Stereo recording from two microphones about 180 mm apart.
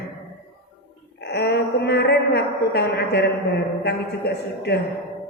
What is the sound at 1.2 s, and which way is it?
A woman's voice, 65° left (ahead or behind).